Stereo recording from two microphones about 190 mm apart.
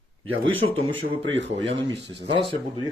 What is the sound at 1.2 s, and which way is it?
Speech, 75° right (ahead or behind).